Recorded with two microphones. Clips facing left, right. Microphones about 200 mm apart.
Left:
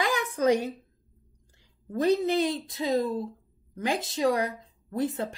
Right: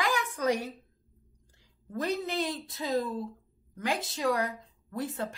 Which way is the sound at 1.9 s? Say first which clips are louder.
Left 8 dB; 20° left (ahead or behind).